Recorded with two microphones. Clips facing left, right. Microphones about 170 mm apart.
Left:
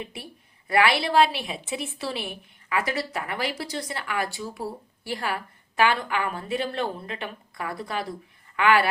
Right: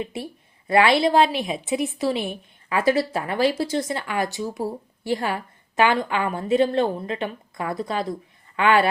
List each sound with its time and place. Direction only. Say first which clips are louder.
0.0 s a woman's voice: right 7 dB; 25° right (ahead or behind)